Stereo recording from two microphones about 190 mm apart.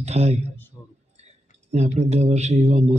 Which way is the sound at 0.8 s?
20° left (ahead or behind).